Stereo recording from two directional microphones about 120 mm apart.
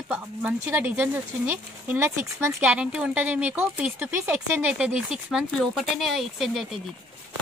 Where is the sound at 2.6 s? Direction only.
5° right (ahead or behind).